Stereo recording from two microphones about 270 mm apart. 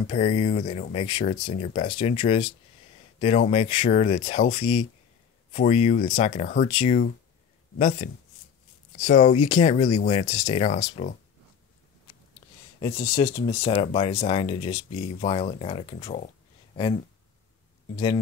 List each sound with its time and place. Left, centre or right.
0.1 s speech: left
12.8 s speech: centre